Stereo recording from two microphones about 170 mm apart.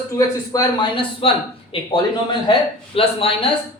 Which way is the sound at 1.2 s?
35° left (ahead or behind).